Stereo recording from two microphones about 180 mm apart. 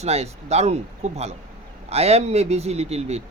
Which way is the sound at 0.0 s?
35° right (ahead or behind).